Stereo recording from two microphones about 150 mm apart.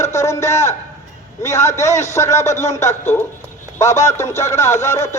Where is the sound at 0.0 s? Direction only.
20° left (ahead or behind).